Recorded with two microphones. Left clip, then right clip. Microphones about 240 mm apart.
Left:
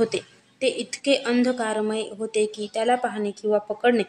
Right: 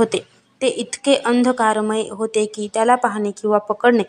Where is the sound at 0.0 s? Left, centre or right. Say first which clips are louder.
Right 5 dB; centre.